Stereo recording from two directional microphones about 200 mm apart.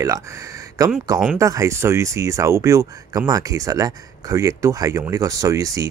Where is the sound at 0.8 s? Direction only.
15° right (ahead or behind).